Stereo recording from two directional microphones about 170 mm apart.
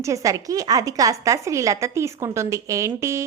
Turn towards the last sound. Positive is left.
turn(degrees=-15)  # may be behind; listen again after turning